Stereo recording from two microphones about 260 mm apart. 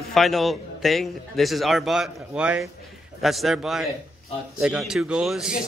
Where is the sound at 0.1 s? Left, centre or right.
Centre.